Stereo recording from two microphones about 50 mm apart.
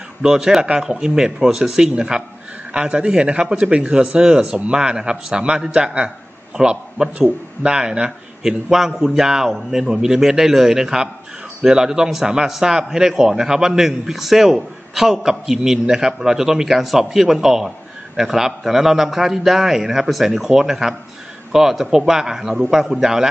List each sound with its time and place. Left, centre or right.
0.2 s a man's voice: centre